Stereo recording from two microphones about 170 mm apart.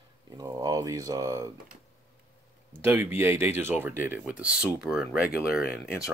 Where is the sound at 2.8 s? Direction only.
15° right (ahead or behind).